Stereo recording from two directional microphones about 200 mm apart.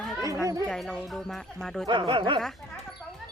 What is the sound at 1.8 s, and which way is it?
Speech, 25° right (ahead or behind).